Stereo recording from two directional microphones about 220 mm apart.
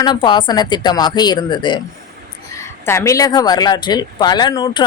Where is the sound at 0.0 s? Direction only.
20° left (ahead or behind).